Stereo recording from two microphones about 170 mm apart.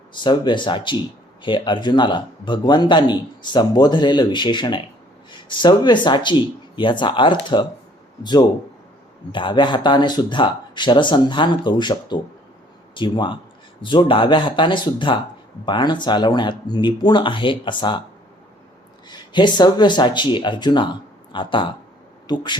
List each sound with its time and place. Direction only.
0.1 s speech: 25° left (ahead or behind)
19.0 s speech: 25° left (ahead or behind)